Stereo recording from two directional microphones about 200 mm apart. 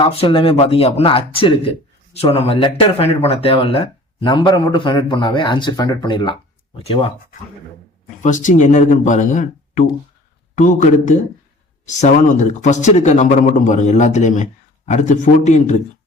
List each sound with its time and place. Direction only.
0.0 s speech: 25° left (ahead or behind)
8.2 s speech: 40° left (ahead or behind)